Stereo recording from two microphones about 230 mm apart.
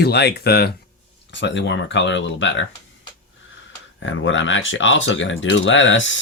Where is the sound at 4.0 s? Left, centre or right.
Left.